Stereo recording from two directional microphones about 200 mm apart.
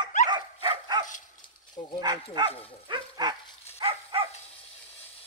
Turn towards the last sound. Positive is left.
turn(degrees=-30)  # may be behind; listen again after turning